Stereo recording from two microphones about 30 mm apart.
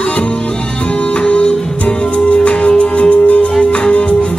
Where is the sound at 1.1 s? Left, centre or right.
Left.